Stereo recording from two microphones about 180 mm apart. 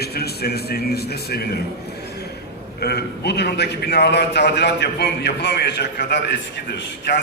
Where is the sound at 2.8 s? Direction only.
65° left (ahead or behind).